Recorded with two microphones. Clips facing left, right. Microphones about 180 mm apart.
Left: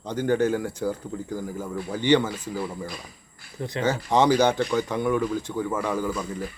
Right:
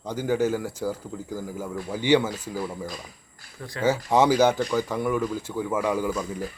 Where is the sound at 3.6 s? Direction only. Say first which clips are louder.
Left 6 dB; 20° left (ahead or behind).